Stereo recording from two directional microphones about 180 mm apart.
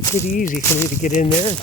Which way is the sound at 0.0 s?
15° left (ahead or behind).